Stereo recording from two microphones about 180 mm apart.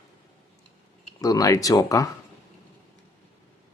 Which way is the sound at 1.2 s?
20° left (ahead or behind).